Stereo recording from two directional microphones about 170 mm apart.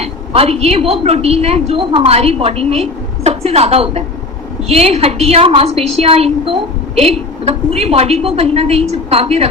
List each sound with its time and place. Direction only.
0.0 s a woman's voice: 35° right (ahead or behind)